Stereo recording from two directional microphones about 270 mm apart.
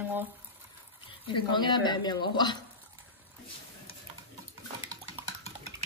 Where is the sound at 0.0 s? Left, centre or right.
Centre.